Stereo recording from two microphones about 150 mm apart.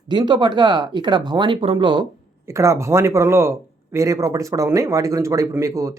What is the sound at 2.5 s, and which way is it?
Speech, 20° right (ahead or behind).